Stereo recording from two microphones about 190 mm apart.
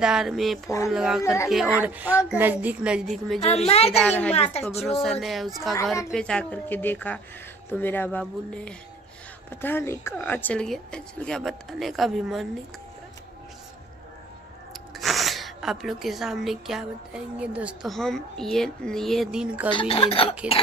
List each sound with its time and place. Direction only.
0.0 s speech: 5° right (ahead or behind)
1.2 s speech: 15° left (ahead or behind)
1.8 s a woman's voice: 10° right (ahead or behind)
3.3 s a child's voice: 35° left (ahead or behind)
3.9 s speech: 5° left (ahead or behind)
14.7 s speech: centre (ahead or behind)
19.7 s speech: 25° left (ahead or behind)